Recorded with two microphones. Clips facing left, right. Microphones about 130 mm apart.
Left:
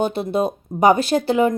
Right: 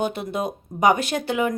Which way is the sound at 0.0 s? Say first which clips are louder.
Left 5 dB; 30° left (ahead or behind).